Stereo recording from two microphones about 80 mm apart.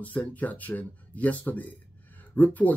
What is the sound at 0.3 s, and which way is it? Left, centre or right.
Speech, centre.